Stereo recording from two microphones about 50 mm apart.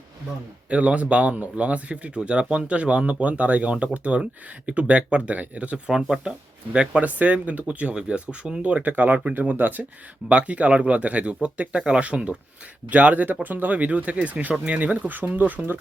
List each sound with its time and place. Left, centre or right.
0.7 s speech: right
5.9 s speech: centre
6.7 s speech: right
10.2 s speech: right